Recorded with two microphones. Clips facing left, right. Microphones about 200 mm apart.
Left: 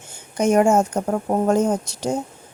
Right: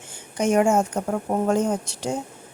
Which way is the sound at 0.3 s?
40° left (ahead or behind).